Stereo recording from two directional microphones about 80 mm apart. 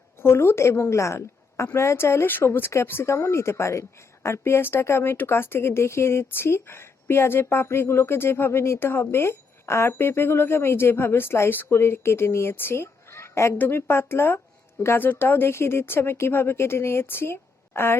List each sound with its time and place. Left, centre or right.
0.2 s a woman's voice: left